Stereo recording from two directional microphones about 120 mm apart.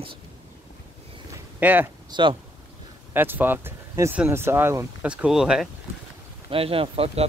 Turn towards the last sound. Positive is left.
turn(degrees=-55)  # may be behind; listen again after turning